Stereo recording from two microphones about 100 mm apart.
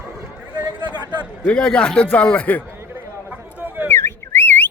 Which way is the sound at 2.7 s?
20° right (ahead or behind).